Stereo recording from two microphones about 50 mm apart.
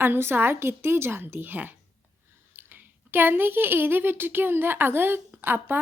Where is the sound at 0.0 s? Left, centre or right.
Right.